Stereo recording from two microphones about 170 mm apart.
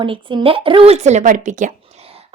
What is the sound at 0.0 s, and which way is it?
A woman's voice, 30° right (ahead or behind).